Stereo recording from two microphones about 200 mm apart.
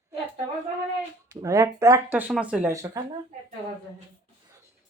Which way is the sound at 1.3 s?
15° right (ahead or behind).